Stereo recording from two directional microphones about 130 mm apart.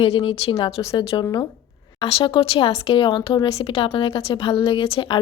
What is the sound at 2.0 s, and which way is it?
Speech, 45° left (ahead or behind).